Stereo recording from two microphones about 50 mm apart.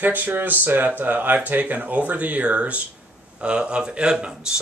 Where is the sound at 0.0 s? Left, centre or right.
Right.